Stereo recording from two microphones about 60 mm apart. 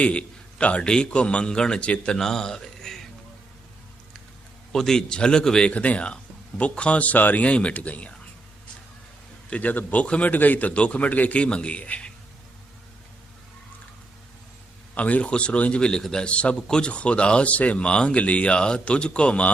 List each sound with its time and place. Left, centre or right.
0.0 s a man's voice: centre
4.7 s a man's voice: centre
9.5 s a man's voice: left
14.9 s a man's voice: left